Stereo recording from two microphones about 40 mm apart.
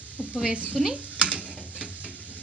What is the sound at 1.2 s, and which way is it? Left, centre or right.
Stir, right.